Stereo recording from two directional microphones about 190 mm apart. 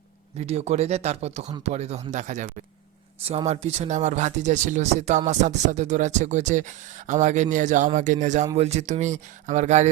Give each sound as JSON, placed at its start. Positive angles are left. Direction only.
{"t": 0.3, "sound": "speech", "side_deg": -35}